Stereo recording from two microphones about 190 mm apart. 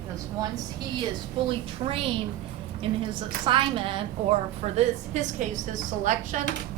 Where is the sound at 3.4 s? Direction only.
25° right (ahead or behind).